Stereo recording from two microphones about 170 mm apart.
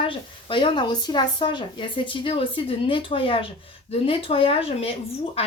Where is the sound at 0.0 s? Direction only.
30° left (ahead or behind).